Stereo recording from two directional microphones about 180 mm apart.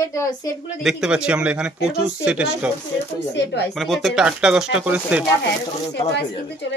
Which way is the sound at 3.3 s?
70° left (ahead or behind).